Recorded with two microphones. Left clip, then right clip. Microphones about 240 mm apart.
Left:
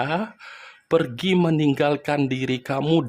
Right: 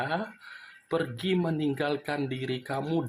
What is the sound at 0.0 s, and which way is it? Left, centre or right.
Speech, left.